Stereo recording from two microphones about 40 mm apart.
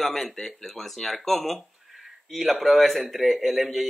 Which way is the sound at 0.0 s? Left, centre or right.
Centre.